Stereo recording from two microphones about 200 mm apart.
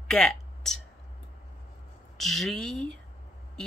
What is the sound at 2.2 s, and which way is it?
Speech, centre (ahead or behind).